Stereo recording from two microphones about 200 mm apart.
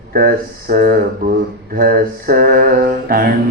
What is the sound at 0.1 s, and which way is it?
Mantra, 50° right (ahead or behind).